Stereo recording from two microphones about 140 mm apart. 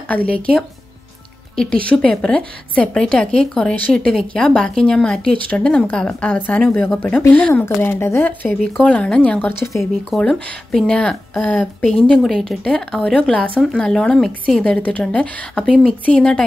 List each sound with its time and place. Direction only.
1.6 s speech: 10° left (ahead or behind)
9.6 s speech: 20° left (ahead or behind)
10.1 s speech: centre (ahead or behind)